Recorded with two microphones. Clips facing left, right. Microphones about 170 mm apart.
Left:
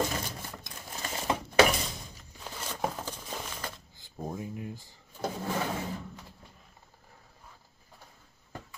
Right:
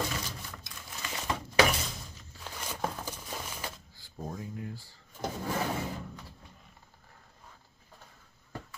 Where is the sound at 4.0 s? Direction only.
20° left (ahead or behind).